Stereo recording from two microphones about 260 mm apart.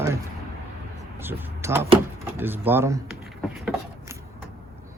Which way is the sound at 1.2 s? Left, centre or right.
Centre.